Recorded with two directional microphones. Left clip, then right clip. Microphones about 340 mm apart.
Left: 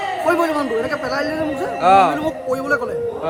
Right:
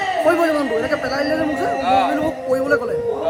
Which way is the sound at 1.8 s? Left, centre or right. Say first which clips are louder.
Left 6 dB; centre.